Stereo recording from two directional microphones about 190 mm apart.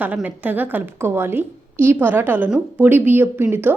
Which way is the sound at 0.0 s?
10° right (ahead or behind).